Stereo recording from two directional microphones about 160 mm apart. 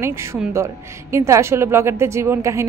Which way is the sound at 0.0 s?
15° right (ahead or behind).